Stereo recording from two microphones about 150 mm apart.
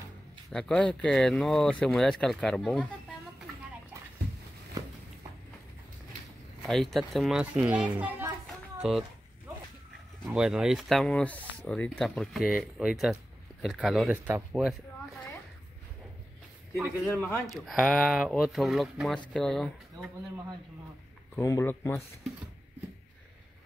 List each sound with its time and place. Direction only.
0.5 s speech: 5° left (ahead or behind)
6.6 s speech: centre (ahead or behind)
10.2 s speech: 5° right (ahead or behind)
17.1 s speech: 10° left (ahead or behind)
17.5 s speech: centre (ahead or behind)
21.4 s speech: 20° left (ahead or behind)